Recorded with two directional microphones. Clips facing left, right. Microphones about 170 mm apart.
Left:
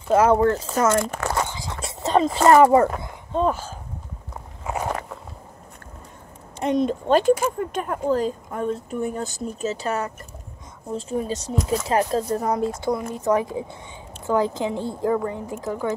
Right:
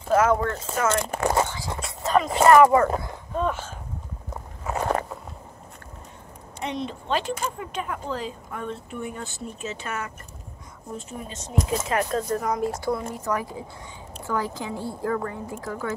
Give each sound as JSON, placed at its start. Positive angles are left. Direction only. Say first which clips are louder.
{"t": 0.1, "sound": "speech", "louder": "left 4 dB", "side_deg": 30}
{"t": 1.1, "sound": "speech", "louder": "right 3 dB", "side_deg": -15}
{"t": 1.8, "sound": "a sound", "louder": "left 2 dB", "side_deg": 25}
{"t": 2.4, "sound": "speech", "louder": "left 1 dB", "side_deg": 30}
{"t": 6.6, "sound": "speech", "louder": "left 9 dB", "side_deg": 45}